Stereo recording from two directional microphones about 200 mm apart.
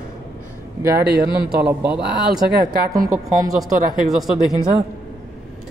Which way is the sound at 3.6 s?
Centre (ahead or behind).